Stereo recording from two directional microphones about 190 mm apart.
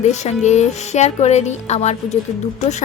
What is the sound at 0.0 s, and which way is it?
A woman's voice, 40° left (ahead or behind).